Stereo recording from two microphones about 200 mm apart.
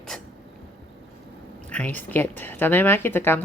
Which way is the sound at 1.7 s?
5° left (ahead or behind).